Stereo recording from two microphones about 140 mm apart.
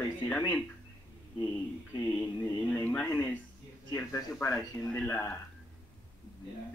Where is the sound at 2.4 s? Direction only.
15° left (ahead or behind).